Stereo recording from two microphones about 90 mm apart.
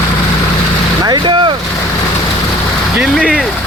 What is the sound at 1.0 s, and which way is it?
Speech, 55° right (ahead or behind).